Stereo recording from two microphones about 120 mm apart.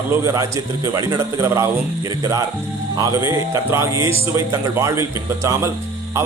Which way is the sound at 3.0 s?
25° right (ahead or behind).